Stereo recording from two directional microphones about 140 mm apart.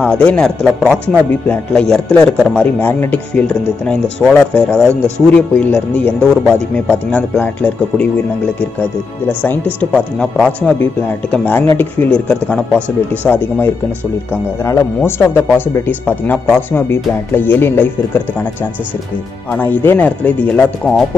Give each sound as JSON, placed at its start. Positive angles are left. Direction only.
{"t": 0.0, "sound": "speech", "side_deg": 10}
{"t": 9.8, "sound": "speech", "side_deg": 5}
{"t": 14.6, "sound": "speech", "side_deg": 20}
{"t": 19.5, "sound": "speech", "side_deg": 15}